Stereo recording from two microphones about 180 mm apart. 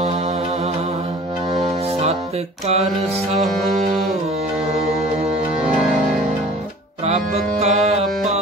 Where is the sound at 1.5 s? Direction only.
35° right (ahead or behind).